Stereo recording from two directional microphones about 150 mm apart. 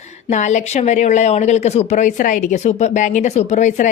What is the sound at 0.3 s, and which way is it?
Speech, 50° left (ahead or behind).